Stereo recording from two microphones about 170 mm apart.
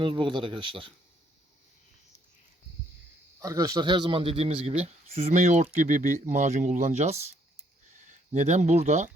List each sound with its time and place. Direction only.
0.0 s speech: 30° right (ahead or behind)
3.4 s a man's voice: 20° right (ahead or behind); by 9.0 s 40° right (ahead or behind)